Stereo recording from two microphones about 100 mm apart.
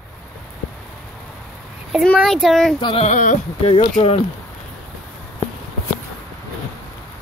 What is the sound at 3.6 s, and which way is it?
Speech, 85° left.